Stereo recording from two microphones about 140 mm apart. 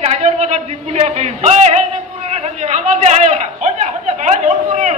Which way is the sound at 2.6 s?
60° right (ahead or behind).